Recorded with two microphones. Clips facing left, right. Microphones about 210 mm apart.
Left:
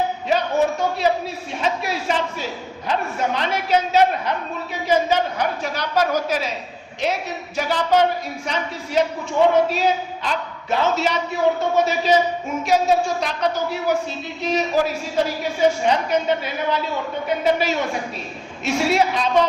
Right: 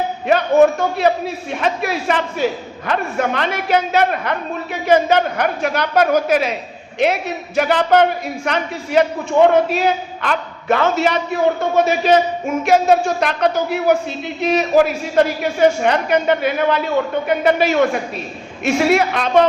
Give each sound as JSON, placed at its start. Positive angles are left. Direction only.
{"t": 0.3, "sound": "a man's voice", "side_deg": -55}